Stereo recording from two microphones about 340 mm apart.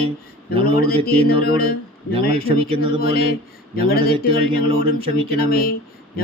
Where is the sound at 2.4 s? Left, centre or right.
Centre.